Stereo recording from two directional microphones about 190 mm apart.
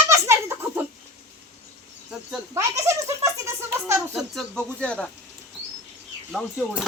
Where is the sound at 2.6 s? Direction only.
15° right (ahead or behind).